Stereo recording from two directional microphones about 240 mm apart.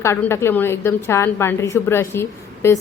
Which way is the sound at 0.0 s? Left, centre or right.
Centre.